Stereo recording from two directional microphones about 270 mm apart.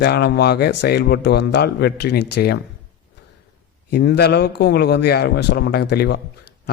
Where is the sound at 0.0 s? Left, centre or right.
Left.